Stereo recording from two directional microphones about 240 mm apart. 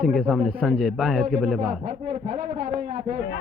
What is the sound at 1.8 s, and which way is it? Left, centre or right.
A man's voice, right.